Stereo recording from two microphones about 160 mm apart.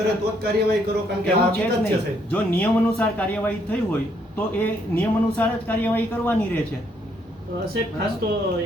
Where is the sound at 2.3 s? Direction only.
10° left (ahead or behind).